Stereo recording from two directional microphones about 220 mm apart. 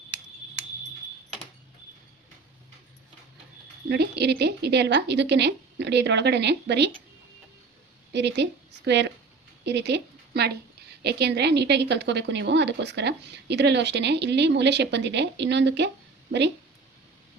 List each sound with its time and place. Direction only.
3.8 s speech: 50° right (ahead or behind)
8.1 s a woman's voice: 50° right (ahead or behind)